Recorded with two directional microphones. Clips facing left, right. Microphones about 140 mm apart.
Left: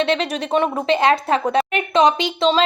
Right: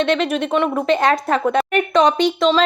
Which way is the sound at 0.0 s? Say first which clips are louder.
Right 2 dB; 30° left (ahead or behind).